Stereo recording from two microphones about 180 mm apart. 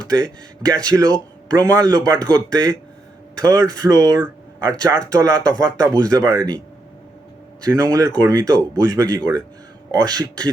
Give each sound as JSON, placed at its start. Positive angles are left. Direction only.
{"t": 0.1, "sound": "speech", "side_deg": -20}
{"t": 7.6, "sound": "speech", "side_deg": -20}